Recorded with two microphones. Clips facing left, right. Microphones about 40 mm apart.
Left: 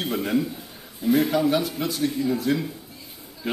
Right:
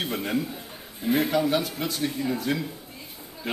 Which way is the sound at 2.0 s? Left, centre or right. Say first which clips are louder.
Left 4 dB; centre.